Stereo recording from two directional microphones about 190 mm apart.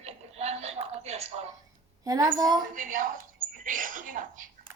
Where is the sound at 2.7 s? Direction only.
45° right (ahead or behind).